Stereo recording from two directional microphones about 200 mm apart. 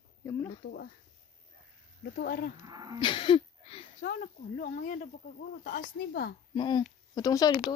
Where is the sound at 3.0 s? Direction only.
25° left (ahead or behind).